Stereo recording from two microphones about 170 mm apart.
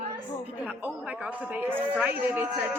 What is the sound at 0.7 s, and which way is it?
A woman's voice, 10° right (ahead or behind).